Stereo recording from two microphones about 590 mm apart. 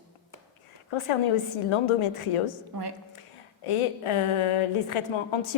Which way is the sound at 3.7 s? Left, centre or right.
Left.